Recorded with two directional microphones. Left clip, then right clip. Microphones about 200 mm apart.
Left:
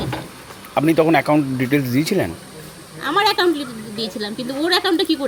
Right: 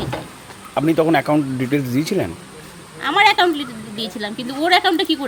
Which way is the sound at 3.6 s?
35° right (ahead or behind).